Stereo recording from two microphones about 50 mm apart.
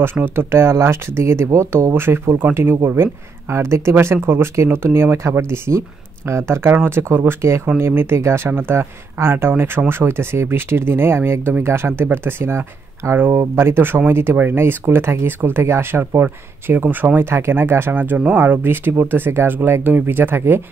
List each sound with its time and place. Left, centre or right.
0.0 s speech: right
3.9 s speech: right
17.2 s speech: right
17.9 s speech: right